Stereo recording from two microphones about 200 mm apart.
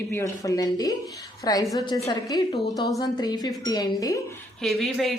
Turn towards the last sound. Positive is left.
turn(degrees=0)  # may be behind; listen again after turning